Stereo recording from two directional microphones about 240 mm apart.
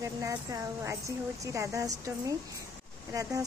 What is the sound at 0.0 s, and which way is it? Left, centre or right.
Speech, centre.